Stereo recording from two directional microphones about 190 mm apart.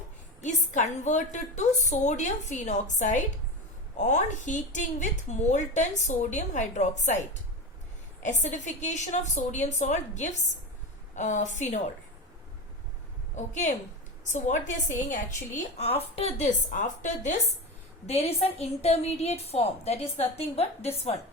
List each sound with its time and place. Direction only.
0.4 s a woman's voice: 40° left (ahead or behind)
8.2 s a woman's voice: 40° left (ahead or behind)
13.3 s a woman's voice: 40° left (ahead or behind)